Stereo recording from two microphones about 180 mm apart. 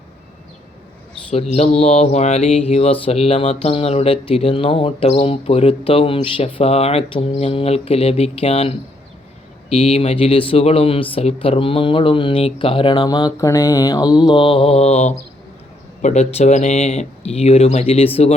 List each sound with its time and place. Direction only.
1.3 s mantra: 35° left (ahead or behind)
11.1 s speech: 30° left (ahead or behind)
16.0 s mantra: 40° left (ahead or behind)